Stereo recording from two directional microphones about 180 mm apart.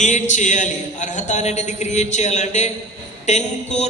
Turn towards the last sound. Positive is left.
turn(degrees=40)  # may be behind; listen again after turning